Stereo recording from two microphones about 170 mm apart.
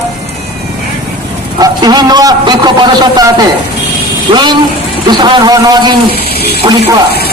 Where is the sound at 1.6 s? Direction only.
25° right (ahead or behind).